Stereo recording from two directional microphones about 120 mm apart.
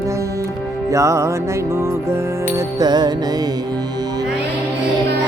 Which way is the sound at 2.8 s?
35° right (ahead or behind).